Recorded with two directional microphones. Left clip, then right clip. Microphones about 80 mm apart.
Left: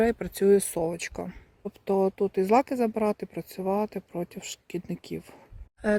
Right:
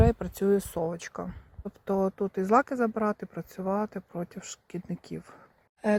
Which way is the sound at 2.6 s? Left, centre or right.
Left.